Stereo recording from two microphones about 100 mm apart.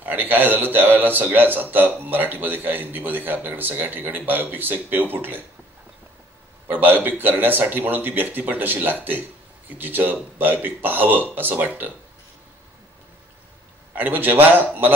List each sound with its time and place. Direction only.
0.0 s a man's voice: 20° right (ahead or behind)
6.7 s a man's voice: 15° right (ahead or behind)
13.9 s a man's voice: 20° right (ahead or behind)